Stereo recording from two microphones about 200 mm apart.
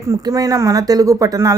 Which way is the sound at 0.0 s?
15° right (ahead or behind).